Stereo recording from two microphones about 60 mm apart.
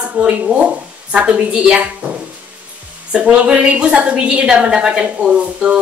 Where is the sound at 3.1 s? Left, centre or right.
Centre.